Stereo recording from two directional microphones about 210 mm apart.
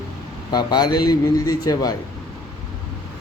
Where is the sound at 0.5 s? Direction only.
20° left (ahead or behind).